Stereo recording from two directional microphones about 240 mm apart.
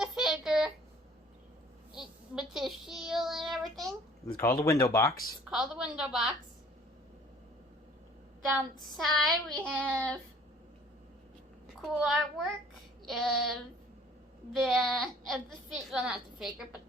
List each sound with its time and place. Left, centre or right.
0.0 s a sound: centre
2.0 s child singing: centre
4.3 s a man's voice: centre
5.5 s a woman's voice: centre
8.5 s a woman's voice: centre
11.8 s a woman's voice: centre
14.5 s a woman's voice: centre